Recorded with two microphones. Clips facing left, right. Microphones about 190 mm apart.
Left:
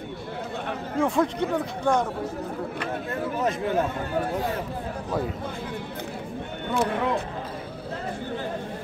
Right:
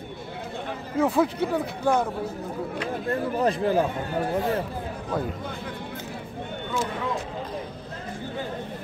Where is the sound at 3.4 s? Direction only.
35° right (ahead or behind).